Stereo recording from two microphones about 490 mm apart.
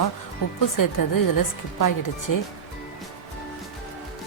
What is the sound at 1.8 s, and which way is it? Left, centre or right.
Speech, left.